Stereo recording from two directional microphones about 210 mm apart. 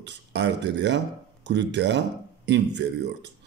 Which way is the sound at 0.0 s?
55° right (ahead or behind).